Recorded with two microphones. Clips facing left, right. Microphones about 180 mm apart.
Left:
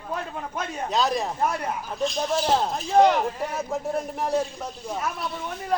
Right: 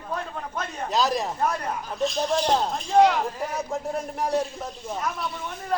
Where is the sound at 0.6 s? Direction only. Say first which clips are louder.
Even; centre (ahead or behind).